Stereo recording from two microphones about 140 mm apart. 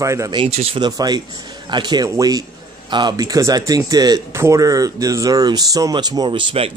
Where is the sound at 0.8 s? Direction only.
30° right (ahead or behind).